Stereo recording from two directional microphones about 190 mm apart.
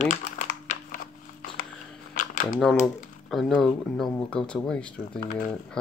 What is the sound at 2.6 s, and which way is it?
Speech, centre (ahead or behind).